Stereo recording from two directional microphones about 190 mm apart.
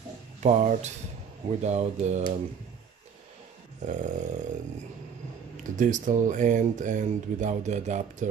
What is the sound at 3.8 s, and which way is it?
Speech, 40° right (ahead or behind).